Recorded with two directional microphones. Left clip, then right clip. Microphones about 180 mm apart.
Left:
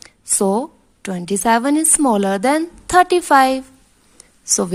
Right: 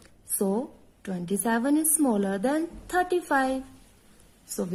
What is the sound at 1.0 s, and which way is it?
A woman's voice, 25° left (ahead or behind).